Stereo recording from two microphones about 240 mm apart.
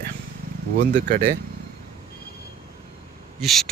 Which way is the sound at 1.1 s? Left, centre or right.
Right.